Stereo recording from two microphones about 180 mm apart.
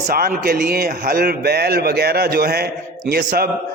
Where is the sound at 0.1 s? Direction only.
55° right (ahead or behind).